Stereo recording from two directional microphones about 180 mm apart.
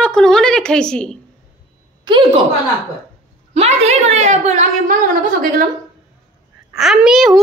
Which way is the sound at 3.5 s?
35° right (ahead or behind).